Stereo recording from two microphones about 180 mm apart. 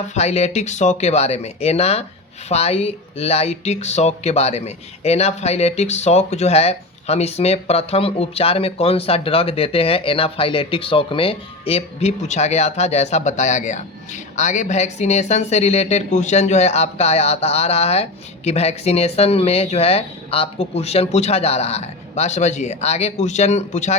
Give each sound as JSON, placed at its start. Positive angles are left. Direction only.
{"t": 0.1, "sound": "speech", "side_deg": 40}